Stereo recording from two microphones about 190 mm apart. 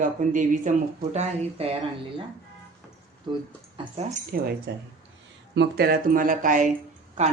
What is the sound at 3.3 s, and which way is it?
Speech, 25° right (ahead or behind).